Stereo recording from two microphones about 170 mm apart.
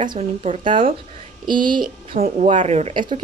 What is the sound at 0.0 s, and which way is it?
Speech, 25° right (ahead or behind).